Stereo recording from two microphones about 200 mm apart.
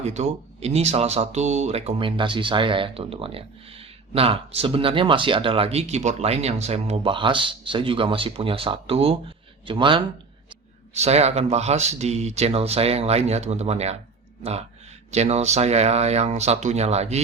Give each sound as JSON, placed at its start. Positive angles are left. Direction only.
{"t": 0.0, "sound": "speech", "side_deg": -35}